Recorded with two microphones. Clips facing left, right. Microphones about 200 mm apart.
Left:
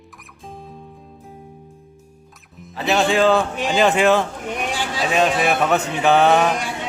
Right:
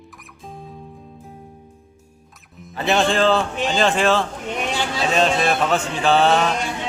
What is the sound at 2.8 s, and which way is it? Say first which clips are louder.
Speech: left 1 dB; centre (ahead or behind).